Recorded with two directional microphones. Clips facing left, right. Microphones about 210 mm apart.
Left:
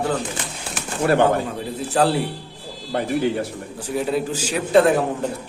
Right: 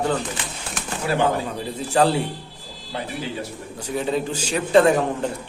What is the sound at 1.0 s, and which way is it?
Speech, 55° left (ahead or behind).